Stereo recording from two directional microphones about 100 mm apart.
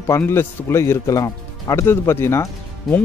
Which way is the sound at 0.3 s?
25° left (ahead or behind).